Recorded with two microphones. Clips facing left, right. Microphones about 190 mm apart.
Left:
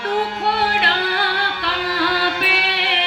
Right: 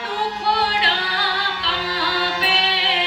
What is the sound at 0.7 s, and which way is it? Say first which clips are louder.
Music: left 3 dB; 55° left (ahead or behind).